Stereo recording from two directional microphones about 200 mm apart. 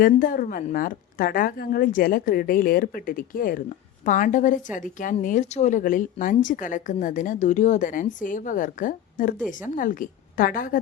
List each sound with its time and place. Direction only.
0.0 s a woman's voice: 45° left (ahead or behind)